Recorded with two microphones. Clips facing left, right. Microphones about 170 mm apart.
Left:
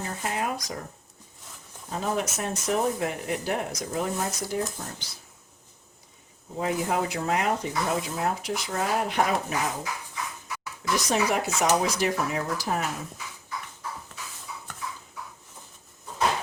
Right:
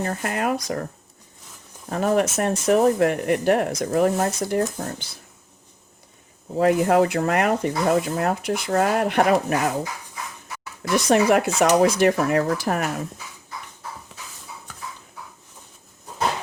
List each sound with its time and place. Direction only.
0.0 s speech: 60° right (ahead or behind)
1.9 s speech: 65° right (ahead or behind)
6.6 s speech: 60° right (ahead or behind)
10.9 s speech: 60° right (ahead or behind)